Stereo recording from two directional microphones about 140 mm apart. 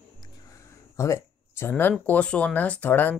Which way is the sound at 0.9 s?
20° left (ahead or behind).